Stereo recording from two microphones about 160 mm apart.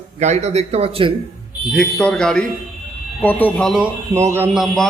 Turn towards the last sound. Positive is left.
turn(degrees=-15)  # may be behind; listen again after turning